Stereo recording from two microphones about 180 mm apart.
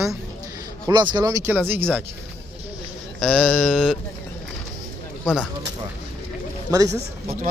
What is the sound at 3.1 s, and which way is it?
Speech, centre (ahead or behind).